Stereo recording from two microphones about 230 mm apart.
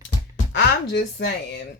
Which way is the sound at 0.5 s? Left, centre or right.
Left.